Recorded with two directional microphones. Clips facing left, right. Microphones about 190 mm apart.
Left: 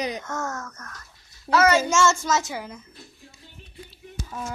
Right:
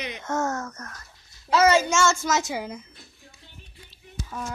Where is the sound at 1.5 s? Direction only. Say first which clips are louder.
Even; 20° right (ahead or behind).